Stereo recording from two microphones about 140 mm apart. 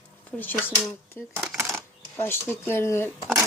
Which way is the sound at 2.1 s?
15° left (ahead or behind).